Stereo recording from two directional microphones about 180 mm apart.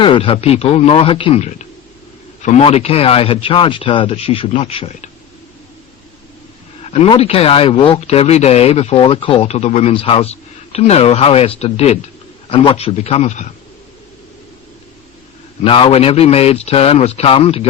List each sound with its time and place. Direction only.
0.0 s speech: 30° left (ahead or behind)
6.8 s speech: 35° left (ahead or behind)
15.6 s speech: 30° left (ahead or behind)